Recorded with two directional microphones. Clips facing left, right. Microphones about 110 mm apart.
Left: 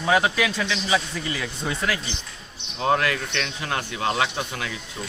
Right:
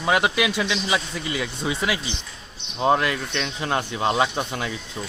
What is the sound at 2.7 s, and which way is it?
Speech, 20° right (ahead or behind).